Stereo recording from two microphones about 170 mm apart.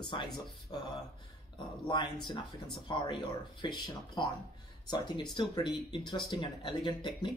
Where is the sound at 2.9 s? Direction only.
30° left (ahead or behind).